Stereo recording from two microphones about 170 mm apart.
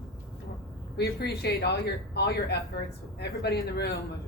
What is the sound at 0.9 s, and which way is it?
Speech, 75° left (ahead or behind).